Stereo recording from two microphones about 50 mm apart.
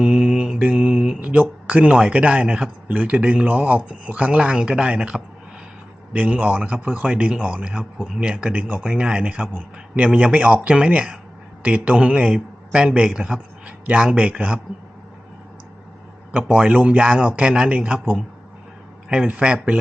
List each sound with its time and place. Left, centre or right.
0.0 s mantra: centre
1.3 s speech: right
6.1 s speech: right
13.1 s a man's voice: centre
13.8 s speech: right
16.4 s speech: right
17.7 s speech: right
19.0 s speech: right